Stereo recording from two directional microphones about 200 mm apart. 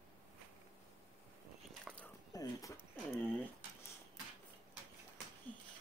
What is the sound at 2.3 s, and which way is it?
Speech, 15° left (ahead or behind).